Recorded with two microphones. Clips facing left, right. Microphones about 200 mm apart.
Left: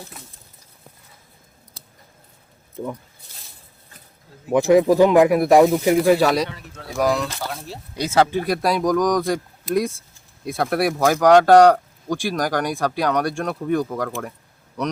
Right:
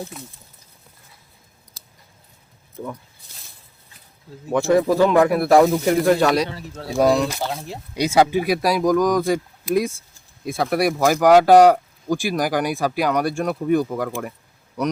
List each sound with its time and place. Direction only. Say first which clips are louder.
4.4 s speech: left 3 dB; 15° left (ahead or behind)
6.5 s speech: right 5 dB; 35° right (ahead or behind); by 14.9 s 5° right (ahead or behind)